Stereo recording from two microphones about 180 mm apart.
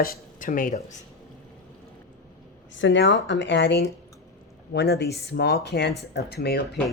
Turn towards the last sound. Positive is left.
turn(degrees=60)  # may be behind; listen again after turning